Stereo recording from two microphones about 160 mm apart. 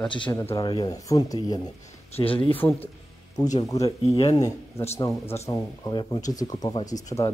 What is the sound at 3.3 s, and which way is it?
Speech, 25° left (ahead or behind).